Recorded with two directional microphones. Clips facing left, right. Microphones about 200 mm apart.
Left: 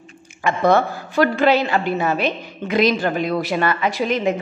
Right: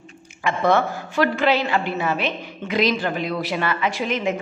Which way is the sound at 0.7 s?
40° left (ahead or behind).